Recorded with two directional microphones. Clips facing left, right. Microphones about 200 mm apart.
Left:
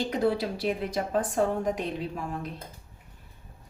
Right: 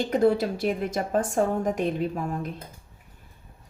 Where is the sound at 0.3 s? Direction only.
50° right (ahead or behind).